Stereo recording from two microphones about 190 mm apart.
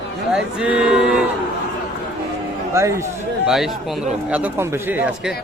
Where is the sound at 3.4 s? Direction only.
Centre (ahead or behind).